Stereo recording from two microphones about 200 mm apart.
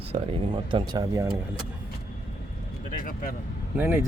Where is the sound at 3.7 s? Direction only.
10° right (ahead or behind).